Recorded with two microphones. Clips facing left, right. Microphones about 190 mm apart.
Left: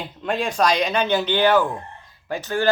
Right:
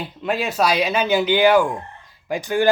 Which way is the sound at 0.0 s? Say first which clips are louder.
Right 1 dB; 5° right (ahead or behind).